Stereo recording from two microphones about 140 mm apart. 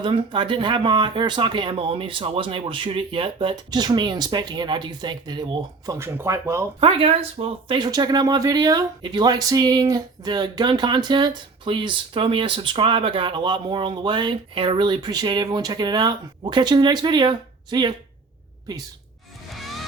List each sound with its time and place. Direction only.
0.0 s speech: 35° right (ahead or behind); by 6.7 s 20° right (ahead or behind)
6.7 s speech: 40° right (ahead or behind)
7.8 s speech: 30° right (ahead or behind)
19.5 s music: centre (ahead or behind)